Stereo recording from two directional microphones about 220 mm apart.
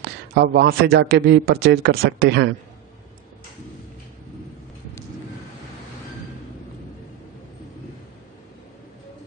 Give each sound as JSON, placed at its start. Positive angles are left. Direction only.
{"t": 0.3, "sound": "a man's voice", "side_deg": -45}